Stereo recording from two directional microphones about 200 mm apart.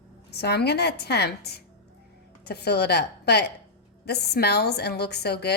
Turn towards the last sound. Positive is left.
turn(degrees=55)  # may be behind; listen again after turning